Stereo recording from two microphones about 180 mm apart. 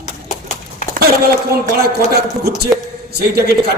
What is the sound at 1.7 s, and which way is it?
Speech, 60° right (ahead or behind).